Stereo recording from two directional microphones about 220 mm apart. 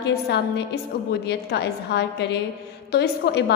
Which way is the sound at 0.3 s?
50° left (ahead or behind).